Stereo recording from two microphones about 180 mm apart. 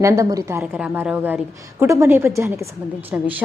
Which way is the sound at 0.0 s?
15° right (ahead or behind).